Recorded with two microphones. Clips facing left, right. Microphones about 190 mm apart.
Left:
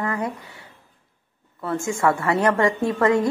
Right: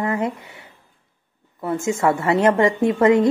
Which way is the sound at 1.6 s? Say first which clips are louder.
Right 2 dB; 20° right (ahead or behind).